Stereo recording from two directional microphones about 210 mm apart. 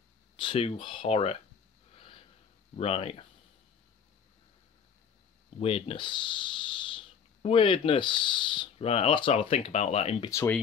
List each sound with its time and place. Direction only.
0.4 s speech: 25° left (ahead or behind)
2.7 s speech: 30° left (ahead or behind)
5.6 s speech: 25° left (ahead or behind)
10.3 s speech: 10° left (ahead or behind)